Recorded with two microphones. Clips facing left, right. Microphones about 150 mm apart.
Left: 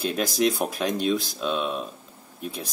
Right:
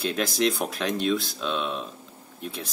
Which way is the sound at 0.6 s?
Centre (ahead or behind).